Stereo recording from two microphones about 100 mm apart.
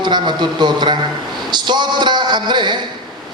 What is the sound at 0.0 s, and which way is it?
A man's voice, 50° right (ahead or behind).